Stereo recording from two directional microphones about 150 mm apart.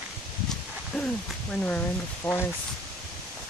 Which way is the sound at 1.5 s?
5° left (ahead or behind).